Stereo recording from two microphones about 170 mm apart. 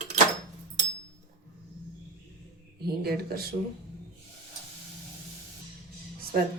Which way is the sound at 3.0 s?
65° right (ahead or behind).